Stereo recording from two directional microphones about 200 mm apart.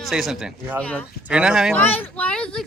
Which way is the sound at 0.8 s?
5° left (ahead or behind).